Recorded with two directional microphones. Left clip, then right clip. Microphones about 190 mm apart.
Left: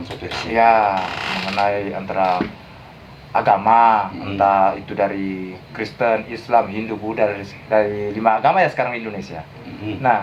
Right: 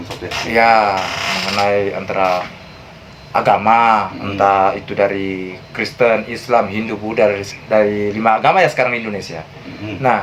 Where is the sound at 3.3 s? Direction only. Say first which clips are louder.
Right 2 dB; 50° right (ahead or behind).